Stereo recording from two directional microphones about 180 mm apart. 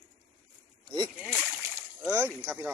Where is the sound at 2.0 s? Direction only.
10° right (ahead or behind).